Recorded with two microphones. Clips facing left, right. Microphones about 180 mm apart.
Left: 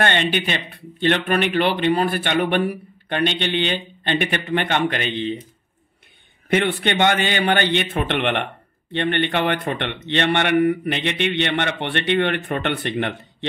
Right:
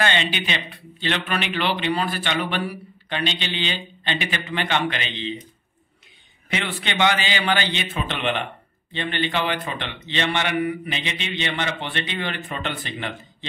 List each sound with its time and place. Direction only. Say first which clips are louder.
0.0 s speech: left 3 dB; 55° left (ahead or behind)
6.5 s a man's voice: left 8 dB; 55° left (ahead or behind)